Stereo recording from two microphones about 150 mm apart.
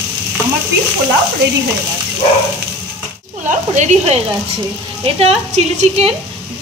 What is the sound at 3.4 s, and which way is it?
A woman's voice, 50° right (ahead or behind).